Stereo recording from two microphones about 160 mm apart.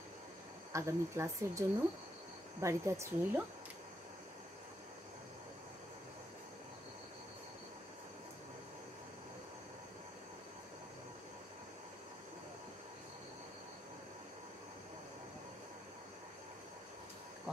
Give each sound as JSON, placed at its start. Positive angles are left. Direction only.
{"t": 0.7, "sound": "speech", "side_deg": -15}